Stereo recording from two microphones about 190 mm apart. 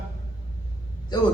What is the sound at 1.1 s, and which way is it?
Speech, 20° left (ahead or behind).